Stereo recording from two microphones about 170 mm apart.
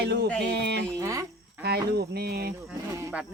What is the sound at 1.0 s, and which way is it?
Speech, 20° right (ahead or behind).